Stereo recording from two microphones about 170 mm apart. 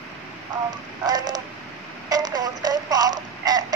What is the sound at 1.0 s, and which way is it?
Radio, 25° right (ahead or behind).